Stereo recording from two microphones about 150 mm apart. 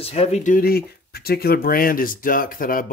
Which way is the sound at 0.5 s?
90° left.